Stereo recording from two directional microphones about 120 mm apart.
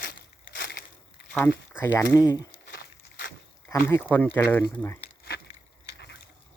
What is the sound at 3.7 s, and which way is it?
Speech, 20° left (ahead or behind).